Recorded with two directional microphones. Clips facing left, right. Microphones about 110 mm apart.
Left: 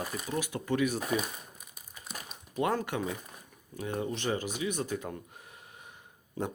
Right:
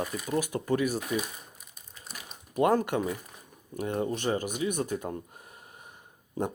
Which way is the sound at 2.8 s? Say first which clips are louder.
Right 4 dB; 45° right (ahead or behind).